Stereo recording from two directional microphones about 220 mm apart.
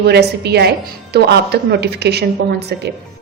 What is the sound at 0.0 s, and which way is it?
Speech, 50° right (ahead or behind).